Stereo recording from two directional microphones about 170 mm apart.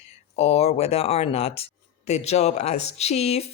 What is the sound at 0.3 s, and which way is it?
Speech, 40° left (ahead or behind).